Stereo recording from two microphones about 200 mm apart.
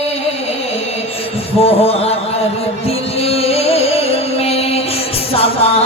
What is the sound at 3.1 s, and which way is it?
Music, 30° left (ahead or behind).